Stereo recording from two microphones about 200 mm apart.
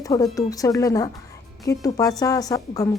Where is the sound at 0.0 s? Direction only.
15° left (ahead or behind).